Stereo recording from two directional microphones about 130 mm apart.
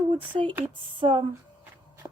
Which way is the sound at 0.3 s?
50° right (ahead or behind).